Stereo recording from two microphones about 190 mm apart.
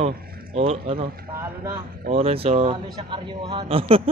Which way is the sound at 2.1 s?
30° right (ahead or behind).